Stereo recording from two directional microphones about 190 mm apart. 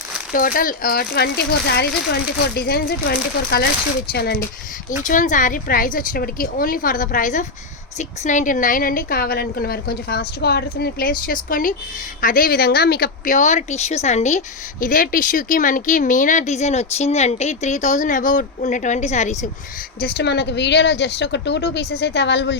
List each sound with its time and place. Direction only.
0.3 s a woman's voice: 45° left (ahead or behind)
5.0 s a woman's voice: 40° left (ahead or behind)
20.0 s speech: 60° left (ahead or behind)